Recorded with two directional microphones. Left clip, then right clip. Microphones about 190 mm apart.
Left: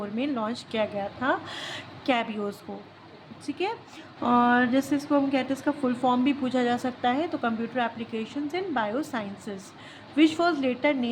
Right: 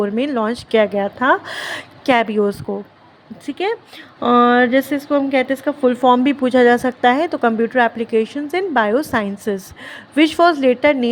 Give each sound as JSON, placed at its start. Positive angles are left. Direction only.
{"t": 0.0, "sound": "a woman's voice", "side_deg": -40}